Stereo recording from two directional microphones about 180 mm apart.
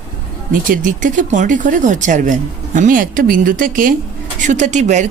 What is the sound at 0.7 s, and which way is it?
Speech, 45° right (ahead or behind).